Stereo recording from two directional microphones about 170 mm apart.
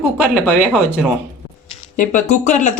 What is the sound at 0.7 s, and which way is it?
Speech, 5° right (ahead or behind).